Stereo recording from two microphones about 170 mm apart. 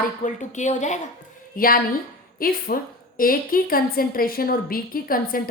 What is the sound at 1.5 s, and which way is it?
A woman's voice, 55° left (ahead or behind).